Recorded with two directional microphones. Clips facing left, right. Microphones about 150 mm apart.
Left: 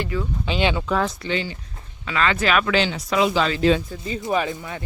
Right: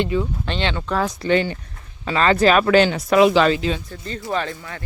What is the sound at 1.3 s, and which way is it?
Speech, 55° right (ahead or behind).